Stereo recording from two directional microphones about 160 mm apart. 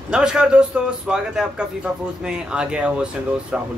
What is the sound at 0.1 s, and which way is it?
A man's voice, 5° right (ahead or behind).